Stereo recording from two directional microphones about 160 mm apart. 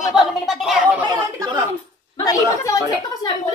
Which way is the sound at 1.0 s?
25° right (ahead or behind).